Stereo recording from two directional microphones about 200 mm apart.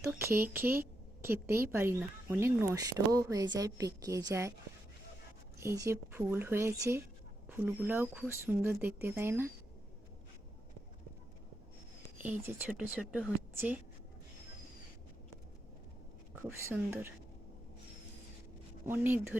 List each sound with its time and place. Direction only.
0.0 s a woman's voice: 15° right (ahead or behind)
5.5 s a woman's voice: 15° right (ahead or behind)
12.2 s a woman's voice: 5° right (ahead or behind)
16.3 s a woman's voice: 10° right (ahead or behind)
18.9 s a woman's voice: 10° right (ahead or behind)